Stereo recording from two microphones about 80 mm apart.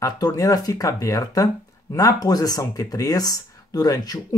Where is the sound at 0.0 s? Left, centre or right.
Left.